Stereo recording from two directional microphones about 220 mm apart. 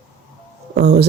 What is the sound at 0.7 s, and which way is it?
Speech, 45° right (ahead or behind).